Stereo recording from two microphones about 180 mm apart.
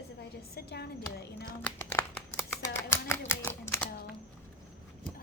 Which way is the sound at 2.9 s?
15° left (ahead or behind).